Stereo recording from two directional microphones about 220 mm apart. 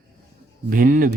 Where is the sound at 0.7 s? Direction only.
40° right (ahead or behind).